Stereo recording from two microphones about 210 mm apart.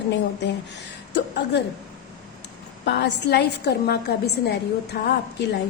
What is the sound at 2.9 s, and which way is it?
A woman's voice, 55° left (ahead or behind).